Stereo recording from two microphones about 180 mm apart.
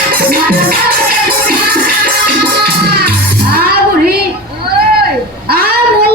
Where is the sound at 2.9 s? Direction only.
60° right (ahead or behind).